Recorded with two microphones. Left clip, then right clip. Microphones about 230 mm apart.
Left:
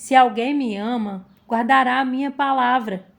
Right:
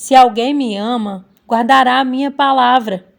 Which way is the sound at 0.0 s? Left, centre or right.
Right.